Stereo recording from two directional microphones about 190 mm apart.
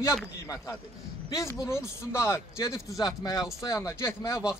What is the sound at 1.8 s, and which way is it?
Speech, 15° left (ahead or behind).